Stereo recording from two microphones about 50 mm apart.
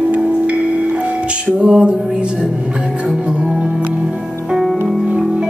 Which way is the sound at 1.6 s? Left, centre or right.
Centre.